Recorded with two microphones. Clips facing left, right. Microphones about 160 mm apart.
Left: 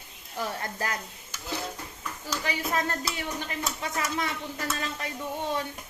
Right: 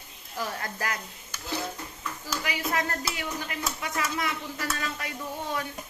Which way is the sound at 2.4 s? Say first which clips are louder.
Left 1 dB; 30° left (ahead or behind).